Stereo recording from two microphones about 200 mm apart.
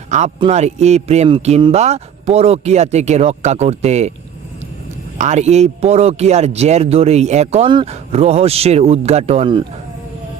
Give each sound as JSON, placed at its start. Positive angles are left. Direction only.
{"t": 0.3, "sound": "a man's voice", "side_deg": -30}
{"t": 5.1, "sound": "a man's voice", "side_deg": -35}